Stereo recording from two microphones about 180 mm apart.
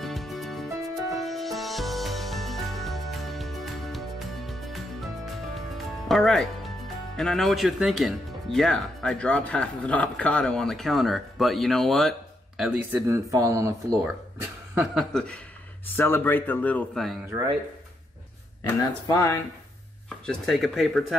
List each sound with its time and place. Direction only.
0.0 s music: centre (ahead or behind)
6.0 s speech: centre (ahead or behind)
13.1 s speech: 15° right (ahead or behind)
14.8 s speech: centre (ahead or behind)
18.7 s speech: 20° left (ahead or behind)
20.2 s speech: centre (ahead or behind)